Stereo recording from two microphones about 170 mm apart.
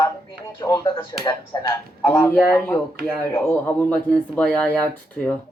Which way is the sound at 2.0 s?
10° left (ahead or behind).